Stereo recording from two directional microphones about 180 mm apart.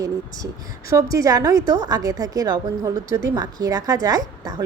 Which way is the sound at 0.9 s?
20° right (ahead or behind).